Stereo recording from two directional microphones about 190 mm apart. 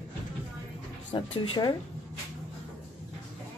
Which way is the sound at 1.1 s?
30° left (ahead or behind).